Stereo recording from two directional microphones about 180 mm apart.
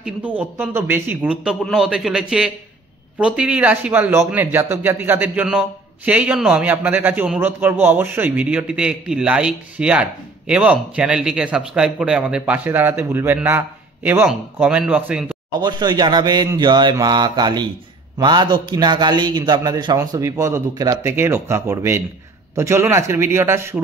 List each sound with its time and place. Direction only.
0.0 s a man's voice: 10° right (ahead or behind)
15.6 s a man's voice: 20° right (ahead or behind)